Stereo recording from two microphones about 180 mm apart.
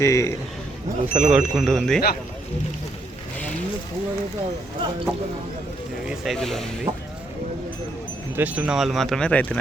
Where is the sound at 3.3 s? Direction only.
10° left (ahead or behind).